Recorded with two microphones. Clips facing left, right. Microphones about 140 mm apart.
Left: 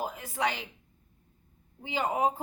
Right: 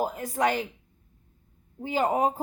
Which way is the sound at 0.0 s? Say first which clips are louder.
Right 5 dB; 40° right (ahead or behind).